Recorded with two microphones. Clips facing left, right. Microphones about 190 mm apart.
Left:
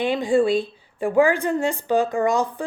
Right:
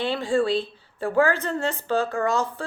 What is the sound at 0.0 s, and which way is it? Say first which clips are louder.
A woman's voice: left 4 dB; 15° left (ahead or behind).